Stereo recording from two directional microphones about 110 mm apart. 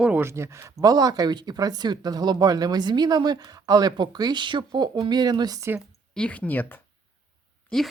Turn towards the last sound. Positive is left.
turn(degrees=5)  # may be behind; listen again after turning